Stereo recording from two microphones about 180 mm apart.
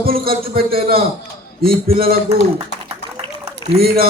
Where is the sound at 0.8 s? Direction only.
30° right (ahead or behind).